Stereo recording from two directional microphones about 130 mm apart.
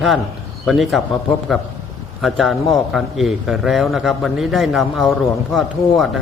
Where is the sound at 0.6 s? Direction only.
Centre (ahead or behind).